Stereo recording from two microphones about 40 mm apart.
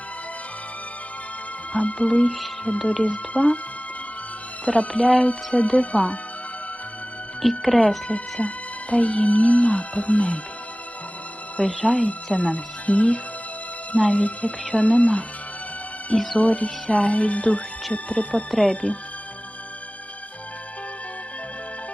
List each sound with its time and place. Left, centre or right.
1.7 s speech: left
4.6 s speech: left
7.4 s speech: centre
7.8 s speech: left
11.5 s speech: left
16.3 s speech: left